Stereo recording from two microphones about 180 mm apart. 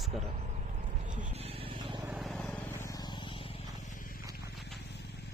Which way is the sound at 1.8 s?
20° right (ahead or behind).